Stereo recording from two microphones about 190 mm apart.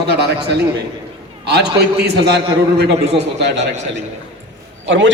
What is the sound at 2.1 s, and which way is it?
A man's voice, 60° right (ahead or behind).